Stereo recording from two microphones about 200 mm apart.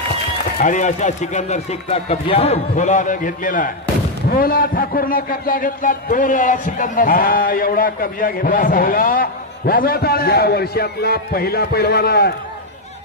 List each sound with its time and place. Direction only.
0.6 s a man's voice: 35° left (ahead or behind)